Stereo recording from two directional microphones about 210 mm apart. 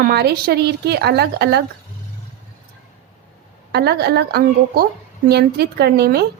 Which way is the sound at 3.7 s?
50° right (ahead or behind).